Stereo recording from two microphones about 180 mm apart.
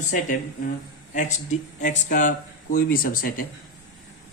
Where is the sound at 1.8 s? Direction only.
45° left (ahead or behind).